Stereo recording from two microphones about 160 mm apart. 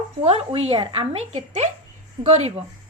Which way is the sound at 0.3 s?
40° right (ahead or behind).